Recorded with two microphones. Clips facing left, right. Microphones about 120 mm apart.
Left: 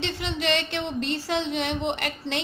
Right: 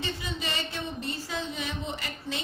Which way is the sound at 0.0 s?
75° left (ahead or behind).